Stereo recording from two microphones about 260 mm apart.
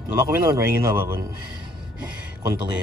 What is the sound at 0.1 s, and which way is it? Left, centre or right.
Speech, centre.